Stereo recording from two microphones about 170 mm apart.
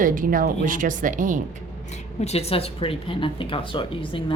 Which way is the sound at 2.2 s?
40° left (ahead or behind).